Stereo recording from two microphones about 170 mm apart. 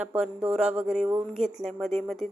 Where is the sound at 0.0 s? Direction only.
5° right (ahead or behind).